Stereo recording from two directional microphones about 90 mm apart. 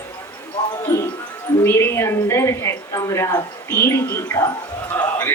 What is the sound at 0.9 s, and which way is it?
Music, 40° left (ahead or behind).